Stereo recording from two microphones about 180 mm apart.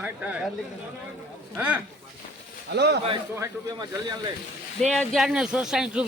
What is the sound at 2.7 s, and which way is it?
Speech, 65° right (ahead or behind).